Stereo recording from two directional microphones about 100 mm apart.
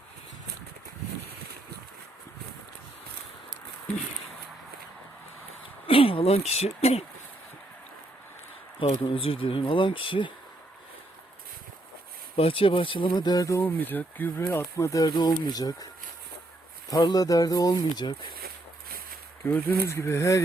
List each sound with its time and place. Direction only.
5.8 s speech: 65° left (ahead or behind); by 7.0 s 90° left
9.0 s speech: 70° left (ahead or behind)
12.4 s speech: 65° left (ahead or behind); by 13.6 s 35° left (ahead or behind)
13.6 s speech: 20° left (ahead or behind); by 15.9 s 40° left (ahead or behind)
16.9 s speech: 40° left (ahead or behind)
19.5 s speech: 25° left (ahead or behind)